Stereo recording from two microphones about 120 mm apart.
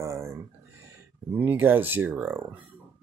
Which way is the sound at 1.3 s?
15° right (ahead or behind).